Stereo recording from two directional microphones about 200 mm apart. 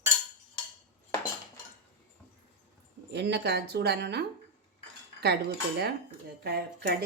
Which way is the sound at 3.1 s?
60° right (ahead or behind).